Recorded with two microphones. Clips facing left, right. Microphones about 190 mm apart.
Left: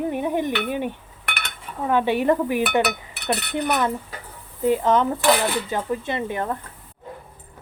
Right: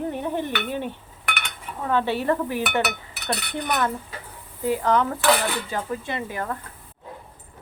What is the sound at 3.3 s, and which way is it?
Speech, 5° left (ahead or behind).